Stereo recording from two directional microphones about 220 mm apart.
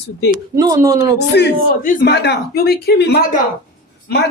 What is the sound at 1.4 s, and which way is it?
Speech, 45° left (ahead or behind).